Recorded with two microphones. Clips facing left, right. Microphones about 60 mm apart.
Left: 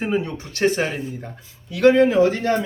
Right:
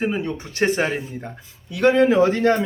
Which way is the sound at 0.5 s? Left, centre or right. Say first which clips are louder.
Even; centre.